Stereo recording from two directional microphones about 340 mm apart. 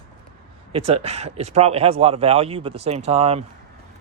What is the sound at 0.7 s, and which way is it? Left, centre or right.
Speech, centre.